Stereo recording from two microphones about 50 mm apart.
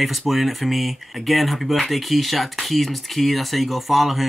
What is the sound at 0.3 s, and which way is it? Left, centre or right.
Speech, centre.